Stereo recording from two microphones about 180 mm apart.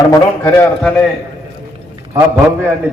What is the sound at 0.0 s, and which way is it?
Speech, 20° left (ahead or behind).